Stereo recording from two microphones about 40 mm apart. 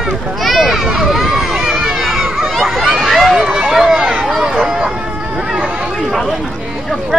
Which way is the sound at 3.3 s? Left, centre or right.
Centre.